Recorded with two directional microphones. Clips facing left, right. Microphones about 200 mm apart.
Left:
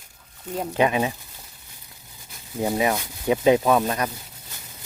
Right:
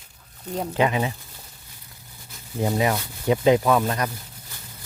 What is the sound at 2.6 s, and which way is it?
Speech, 15° left (ahead or behind).